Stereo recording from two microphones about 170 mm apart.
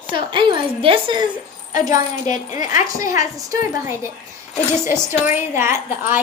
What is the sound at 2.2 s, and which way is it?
Speech, 45° left (ahead or behind).